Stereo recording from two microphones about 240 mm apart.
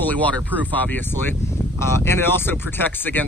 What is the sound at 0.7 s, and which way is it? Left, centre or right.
Speech, centre.